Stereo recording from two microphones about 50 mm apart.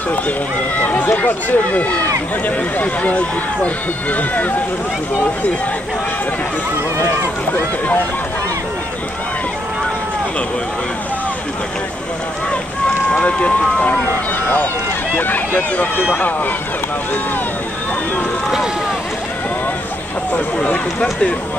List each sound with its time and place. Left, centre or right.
0.7 s speech: left
13.1 s speech: left
15.1 s speech: left
20.6 s speech: left